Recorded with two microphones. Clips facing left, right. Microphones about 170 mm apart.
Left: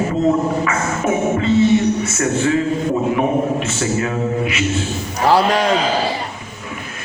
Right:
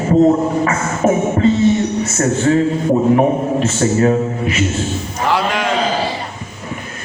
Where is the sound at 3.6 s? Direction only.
35° right (ahead or behind).